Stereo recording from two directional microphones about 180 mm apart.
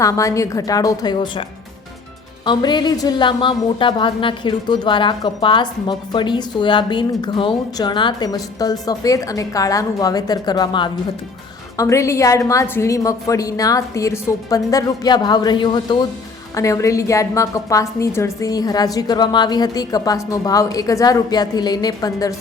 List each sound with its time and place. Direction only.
0.0 s a woman's voice: 20° left (ahead or behind)